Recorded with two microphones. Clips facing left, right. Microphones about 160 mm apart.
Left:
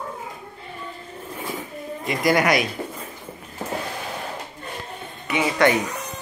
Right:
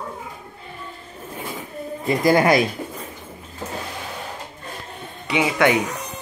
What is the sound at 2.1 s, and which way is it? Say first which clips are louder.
Speech: right 3 dB; 30° right (ahead or behind).